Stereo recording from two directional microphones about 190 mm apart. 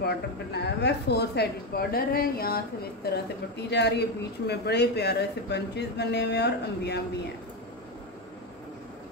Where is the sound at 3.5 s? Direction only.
65° left (ahead or behind).